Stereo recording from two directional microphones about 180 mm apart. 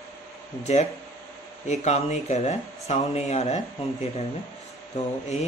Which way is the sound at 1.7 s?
35° left (ahead or behind).